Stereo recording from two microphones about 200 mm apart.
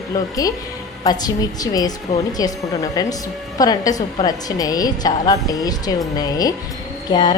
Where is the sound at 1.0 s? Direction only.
20° left (ahead or behind).